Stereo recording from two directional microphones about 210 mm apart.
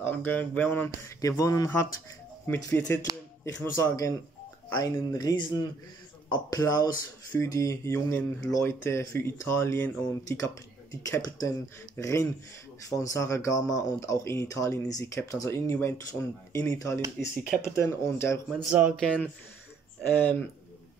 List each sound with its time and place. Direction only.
0.0 s speech: 10° left (ahead or behind)
3.1 s speech: 20° right (ahead or behind)
3.4 s speech: 15° left (ahead or behind)
18.6 s speech: 5° right (ahead or behind)
20.2 s speech: 5° left (ahead or behind)